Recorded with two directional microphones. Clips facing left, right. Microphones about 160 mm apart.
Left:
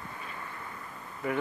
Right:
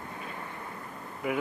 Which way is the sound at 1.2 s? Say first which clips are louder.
Right 1 dB; 10° right (ahead or behind).